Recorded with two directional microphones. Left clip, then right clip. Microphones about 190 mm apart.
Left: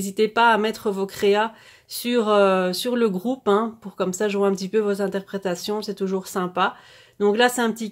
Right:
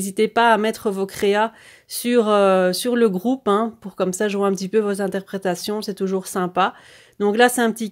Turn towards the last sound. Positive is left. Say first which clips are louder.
# right 3 dB
turn(degrees=-40)  # may be behind; listen again after turning